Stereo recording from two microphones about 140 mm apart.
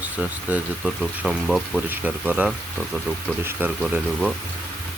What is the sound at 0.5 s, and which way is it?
Speech, 5° right (ahead or behind).